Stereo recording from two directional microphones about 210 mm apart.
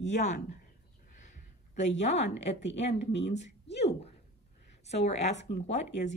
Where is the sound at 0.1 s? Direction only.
35° left (ahead or behind).